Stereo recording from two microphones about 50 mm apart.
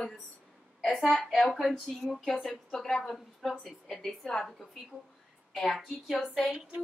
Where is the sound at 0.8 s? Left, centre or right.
Centre.